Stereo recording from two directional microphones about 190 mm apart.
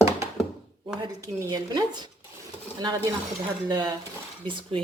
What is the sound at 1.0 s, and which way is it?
Speech, 20° right (ahead or behind).